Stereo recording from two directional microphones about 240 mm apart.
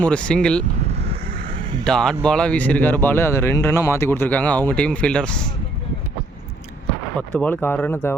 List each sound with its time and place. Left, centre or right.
0.0 s speech: centre
0.9 s vehicle: right
1.8 s speech: centre
7.2 s speech: centre